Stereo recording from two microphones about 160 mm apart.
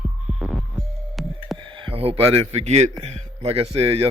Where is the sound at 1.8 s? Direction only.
35° right (ahead or behind).